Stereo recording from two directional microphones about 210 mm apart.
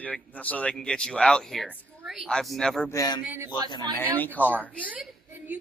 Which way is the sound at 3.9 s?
10° left (ahead or behind).